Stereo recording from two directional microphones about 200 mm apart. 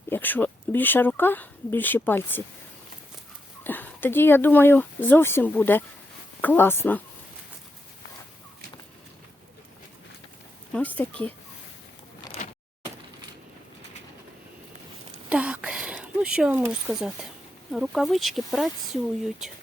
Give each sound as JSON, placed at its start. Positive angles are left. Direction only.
{"t": 0.1, "sound": "speech", "side_deg": 10}
{"t": 3.6, "sound": "speech", "side_deg": 10}
{"t": 10.7, "sound": "speech", "side_deg": 5}
{"t": 12.4, "sound": "a sound", "side_deg": 40}
{"t": 15.3, "sound": "a sound", "side_deg": -5}
{"t": 17.7, "sound": "speech", "side_deg": 0}